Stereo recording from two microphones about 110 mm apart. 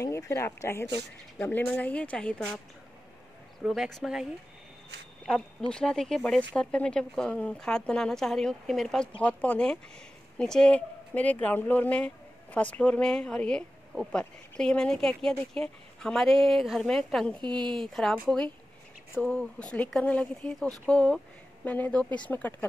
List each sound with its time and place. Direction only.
0.0 s speech: 25° left (ahead or behind); by 2.6 s 10° left (ahead or behind)
3.6 s speech: 5° right (ahead or behind)
5.7 s speech: 5° left (ahead or behind)
17.4 s a woman's voice: 45° right (ahead or behind)
17.6 s speech: 5° left (ahead or behind)
19.2 s speech: 10° left (ahead or behind)